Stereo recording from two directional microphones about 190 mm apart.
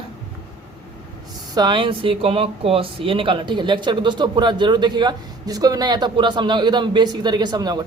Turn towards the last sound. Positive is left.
turn(degrees=-20)  # may be behind; listen again after turning